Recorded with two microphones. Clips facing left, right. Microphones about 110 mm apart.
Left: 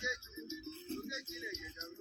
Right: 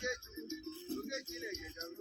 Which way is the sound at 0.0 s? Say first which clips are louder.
Right 2 dB; 55° right (ahead or behind).